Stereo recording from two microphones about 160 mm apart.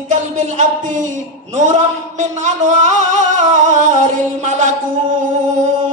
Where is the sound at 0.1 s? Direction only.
50° right (ahead or behind).